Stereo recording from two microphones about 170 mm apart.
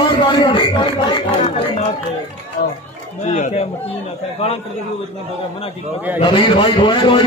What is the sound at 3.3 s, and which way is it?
Speech, 45° left (ahead or behind).